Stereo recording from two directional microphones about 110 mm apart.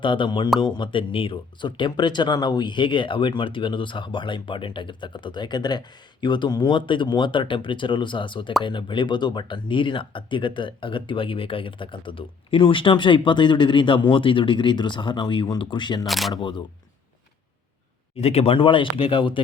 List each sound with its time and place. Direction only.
0.0 s speech: 45° left (ahead or behind)
16.0 s speech: centre (ahead or behind)
16.3 s speech: 45° left (ahead or behind)
18.2 s speech: 70° left (ahead or behind)
18.5 s speech: 50° left (ahead or behind)